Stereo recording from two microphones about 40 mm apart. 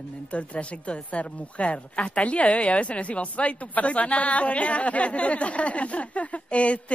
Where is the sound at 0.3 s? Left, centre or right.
Left.